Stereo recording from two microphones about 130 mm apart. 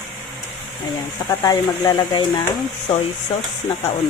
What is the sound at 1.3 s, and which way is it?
Speech, 30° left (ahead or behind).